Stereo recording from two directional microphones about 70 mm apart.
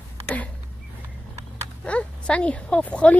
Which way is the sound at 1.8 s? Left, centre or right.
Centre.